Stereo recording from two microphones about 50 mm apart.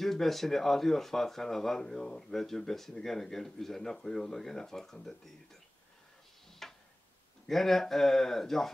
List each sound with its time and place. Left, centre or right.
0.0 s speech: centre
6.6 s tick-tock: centre
7.4 s speech: centre